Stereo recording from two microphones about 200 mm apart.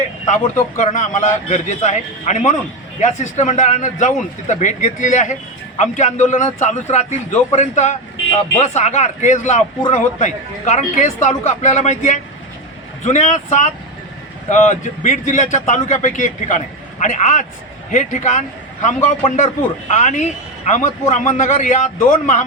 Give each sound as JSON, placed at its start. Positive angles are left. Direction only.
{"t": 0.8, "sound": "a man's voice", "side_deg": 40}